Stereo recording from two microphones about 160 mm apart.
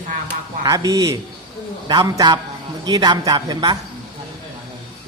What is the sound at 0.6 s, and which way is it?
A woman's voice, 20° right (ahead or behind).